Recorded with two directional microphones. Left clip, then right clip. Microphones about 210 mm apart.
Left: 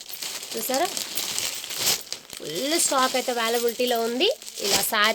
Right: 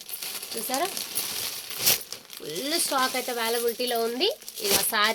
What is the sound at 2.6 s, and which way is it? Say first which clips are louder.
Speech: left 3 dB; 50° left (ahead or behind).